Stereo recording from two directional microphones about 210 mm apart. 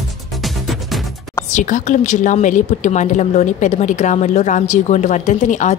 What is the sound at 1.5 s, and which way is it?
A woman's voice, 35° left (ahead or behind).